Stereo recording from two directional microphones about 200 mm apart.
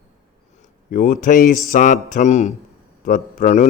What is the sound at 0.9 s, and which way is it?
Mantra, 40° left (ahead or behind).